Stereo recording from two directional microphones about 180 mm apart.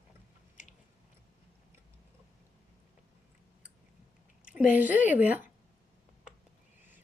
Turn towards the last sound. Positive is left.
turn(degrees=-10)  # may be behind; listen again after turning